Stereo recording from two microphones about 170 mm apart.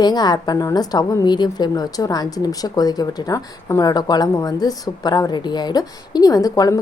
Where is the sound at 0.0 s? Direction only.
25° left (ahead or behind).